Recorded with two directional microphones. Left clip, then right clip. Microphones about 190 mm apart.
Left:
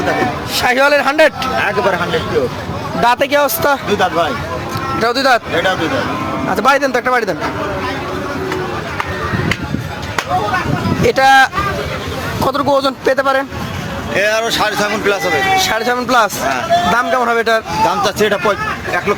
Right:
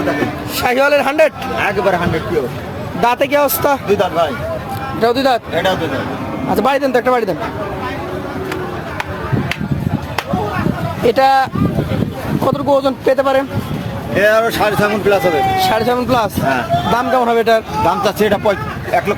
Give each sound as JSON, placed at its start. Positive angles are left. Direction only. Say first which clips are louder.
{"t": 0.5, "sound": "a man's voice", "louder": "left 1 dB", "side_deg": -5}
{"t": 3.0, "sound": "speech", "louder": "left 1 dB", "side_deg": -10}
{"t": 3.8, "sound": "speech", "louder": "even", "side_deg": -70}
{"t": 4.9, "sound": "speech", "louder": "left 1 dB", "side_deg": -15}
{"t": 6.6, "sound": "speech", "louder": "left 1 dB", "side_deg": -10}
{"t": 11.1, "sound": "speech", "louder": "left 3 dB", "side_deg": -10}
{"t": 12.5, "sound": "a man's voice", "louder": "even", "side_deg": 0}
{"t": 14.2, "sound": "speech", "louder": "right 2 dB", "side_deg": -45}
{"t": 15.5, "sound": "a man's voice", "louder": "even", "side_deg": 0}
{"t": 17.8, "sound": "speech", "louder": "left 1 dB", "side_deg": -60}